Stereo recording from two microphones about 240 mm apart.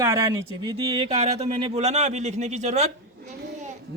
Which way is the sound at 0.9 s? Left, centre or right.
Right.